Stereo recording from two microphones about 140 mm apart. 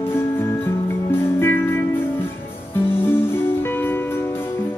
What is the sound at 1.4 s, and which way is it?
Music, 15° left (ahead or behind).